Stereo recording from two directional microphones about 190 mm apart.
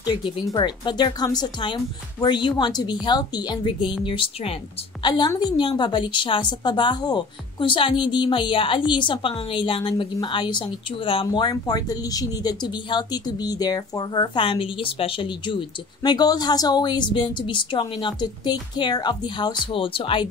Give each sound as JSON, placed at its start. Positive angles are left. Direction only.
{"t": 0.0, "sound": "a woman's voice", "side_deg": 25}